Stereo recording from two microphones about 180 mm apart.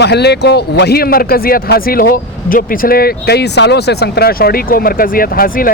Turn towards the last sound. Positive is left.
turn(degrees=55)  # may be behind; listen again after turning